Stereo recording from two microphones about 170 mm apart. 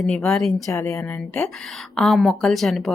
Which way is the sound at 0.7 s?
15° left (ahead or behind).